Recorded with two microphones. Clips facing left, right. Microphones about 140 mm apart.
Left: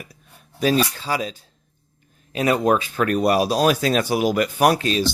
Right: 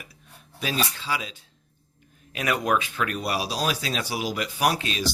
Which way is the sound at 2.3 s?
30° left (ahead or behind).